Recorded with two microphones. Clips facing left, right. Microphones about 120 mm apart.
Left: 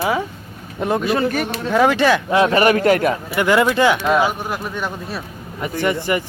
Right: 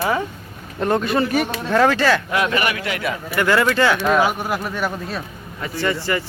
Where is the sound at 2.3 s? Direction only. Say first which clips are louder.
Left 6 dB; 30° left (ahead or behind).